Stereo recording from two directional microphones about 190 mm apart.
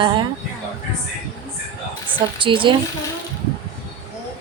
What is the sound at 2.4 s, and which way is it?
Speech, 25° right (ahead or behind).